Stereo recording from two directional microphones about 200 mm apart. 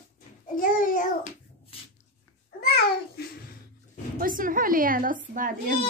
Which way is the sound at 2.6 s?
50° left (ahead or behind).